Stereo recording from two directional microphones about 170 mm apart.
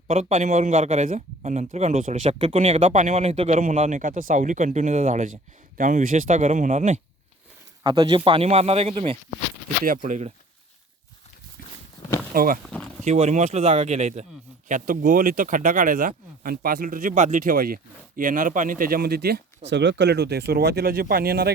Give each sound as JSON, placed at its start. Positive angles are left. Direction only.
{"t": 0.1, "sound": "speech", "side_deg": -40}
{"t": 3.5, "sound": "speech", "side_deg": -50}
{"t": 7.9, "sound": "speech", "side_deg": -25}
{"t": 9.8, "sound": "speech", "side_deg": -55}
{"t": 12.3, "sound": "speech", "side_deg": -60}
{"t": 13.1, "sound": "speech", "side_deg": -40}